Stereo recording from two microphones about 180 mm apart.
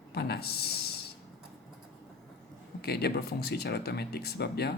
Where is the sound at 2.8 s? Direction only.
60° left (ahead or behind).